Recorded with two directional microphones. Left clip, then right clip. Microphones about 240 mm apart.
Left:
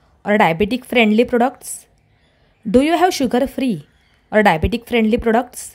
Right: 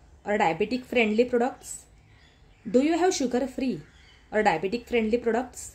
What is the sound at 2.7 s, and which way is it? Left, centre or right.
A woman's voice, left.